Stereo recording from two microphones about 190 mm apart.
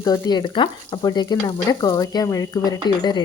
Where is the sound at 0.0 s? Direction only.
20° left (ahead or behind).